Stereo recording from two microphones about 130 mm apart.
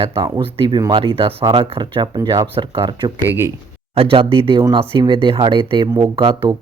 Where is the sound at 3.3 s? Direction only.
20° right (ahead or behind).